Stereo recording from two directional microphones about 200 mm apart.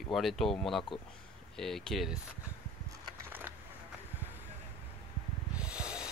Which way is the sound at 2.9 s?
15° right (ahead or behind).